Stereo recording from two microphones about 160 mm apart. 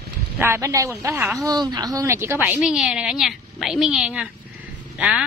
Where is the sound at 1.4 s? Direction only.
25° right (ahead or behind).